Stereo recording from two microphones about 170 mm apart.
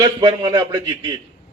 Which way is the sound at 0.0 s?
25° right (ahead or behind).